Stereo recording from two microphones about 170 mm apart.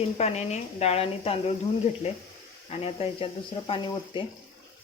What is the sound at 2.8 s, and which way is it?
Speech, 35° left (ahead or behind).